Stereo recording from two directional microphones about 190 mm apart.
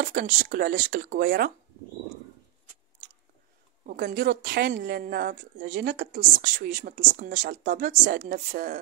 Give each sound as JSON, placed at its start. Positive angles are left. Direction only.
{"t": 0.0, "sound": "speech", "side_deg": -50}
{"t": 3.8, "sound": "speech", "side_deg": -50}